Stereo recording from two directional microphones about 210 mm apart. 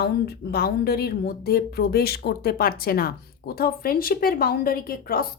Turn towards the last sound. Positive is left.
turn(degrees=45)  # may be behind; listen again after turning